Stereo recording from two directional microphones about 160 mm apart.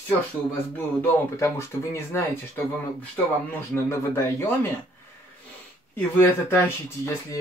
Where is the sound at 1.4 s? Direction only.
15° left (ahead or behind).